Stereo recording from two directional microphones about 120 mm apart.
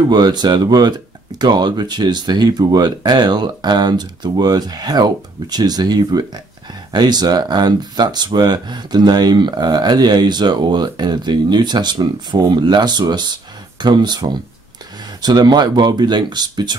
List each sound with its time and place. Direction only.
0.1 s speech: 35° right (ahead or behind)